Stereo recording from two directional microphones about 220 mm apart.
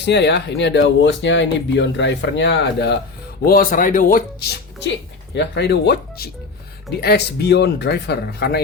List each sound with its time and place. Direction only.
0.0 s speech: 50° left (ahead or behind)